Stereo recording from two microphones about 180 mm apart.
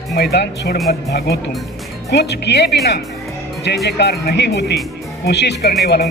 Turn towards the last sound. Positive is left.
turn(degrees=65)  # may be behind; listen again after turning